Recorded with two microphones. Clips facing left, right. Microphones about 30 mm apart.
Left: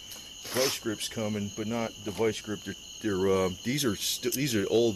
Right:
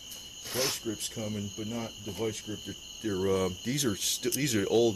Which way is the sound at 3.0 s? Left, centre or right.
Centre.